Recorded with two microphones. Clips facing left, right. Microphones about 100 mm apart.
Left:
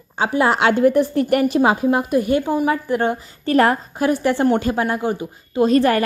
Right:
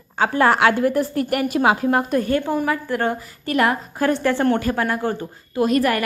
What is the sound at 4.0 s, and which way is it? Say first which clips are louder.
A woman's voice: left 1 dB; 15° left (ahead or behind).